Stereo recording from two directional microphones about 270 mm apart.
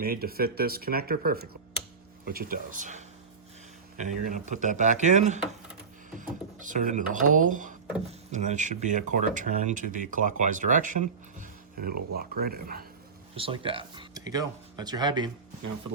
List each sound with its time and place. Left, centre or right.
0.0 s speech: right
13.3 s speech: centre